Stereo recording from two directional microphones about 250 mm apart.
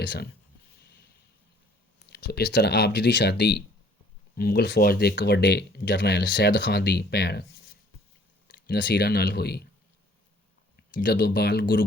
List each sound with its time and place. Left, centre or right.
0.0 s speech: left
2.0 s speech: left
8.4 s speech: left
10.9 s speech: left